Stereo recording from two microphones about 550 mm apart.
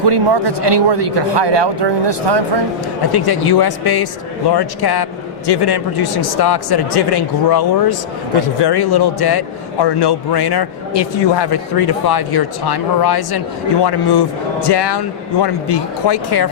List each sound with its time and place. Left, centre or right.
0.0 s speech: right
3.1 s a man's voice: left